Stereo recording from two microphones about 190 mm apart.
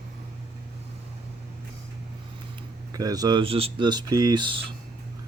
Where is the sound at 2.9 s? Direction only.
20° right (ahead or behind).